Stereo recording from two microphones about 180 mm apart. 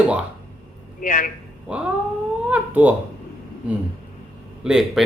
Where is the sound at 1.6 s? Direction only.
5° right (ahead or behind).